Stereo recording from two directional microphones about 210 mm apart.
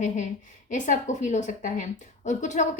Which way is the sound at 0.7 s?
35° left (ahead or behind).